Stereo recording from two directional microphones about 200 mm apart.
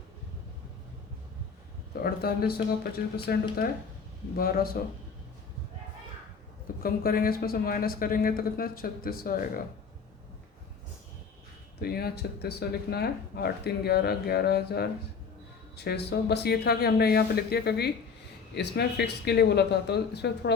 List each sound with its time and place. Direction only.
2.0 s speech: 50° left (ahead or behind)
6.8 s speech: 45° left (ahead or behind)
11.8 s speech: 50° left (ahead or behind)